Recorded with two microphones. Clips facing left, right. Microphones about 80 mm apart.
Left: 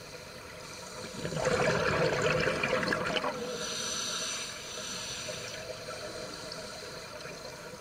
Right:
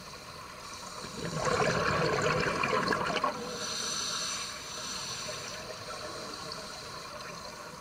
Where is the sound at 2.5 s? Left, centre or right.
Centre.